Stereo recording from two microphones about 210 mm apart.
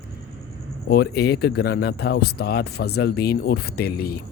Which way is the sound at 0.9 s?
50° left (ahead or behind).